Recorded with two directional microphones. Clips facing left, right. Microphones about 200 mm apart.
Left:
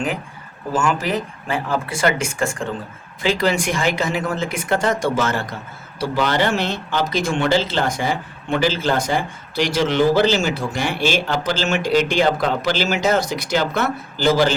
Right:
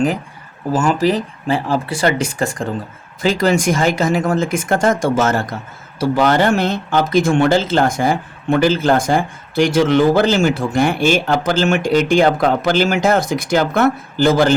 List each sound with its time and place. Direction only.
0.7 s speech: 35° right (ahead or behind); by 14.5 s 50° right (ahead or behind)